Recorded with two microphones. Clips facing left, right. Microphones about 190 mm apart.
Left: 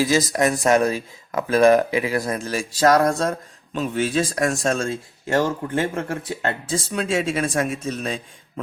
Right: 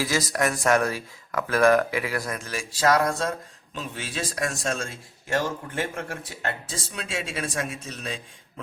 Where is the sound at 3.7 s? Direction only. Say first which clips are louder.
Left 12 dB; 50° left (ahead or behind).